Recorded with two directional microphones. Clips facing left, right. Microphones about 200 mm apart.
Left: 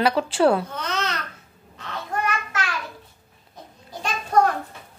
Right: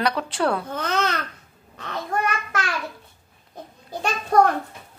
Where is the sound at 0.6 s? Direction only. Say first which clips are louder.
Right 4 dB; 55° right (ahead or behind).